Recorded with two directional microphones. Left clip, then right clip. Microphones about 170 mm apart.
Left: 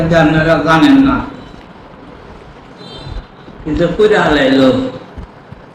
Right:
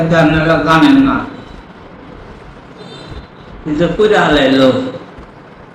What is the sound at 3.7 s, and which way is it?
Speech, centre (ahead or behind).